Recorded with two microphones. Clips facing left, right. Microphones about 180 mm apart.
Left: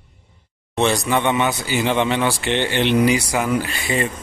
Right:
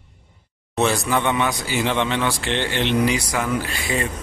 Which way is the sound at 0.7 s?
Centre (ahead or behind).